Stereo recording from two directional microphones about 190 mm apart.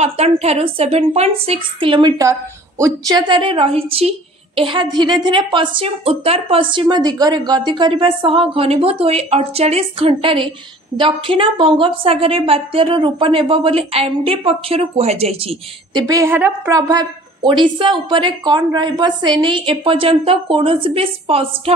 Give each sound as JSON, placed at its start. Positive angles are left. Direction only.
{"t": 0.0, "sound": "a woman's voice", "side_deg": -35}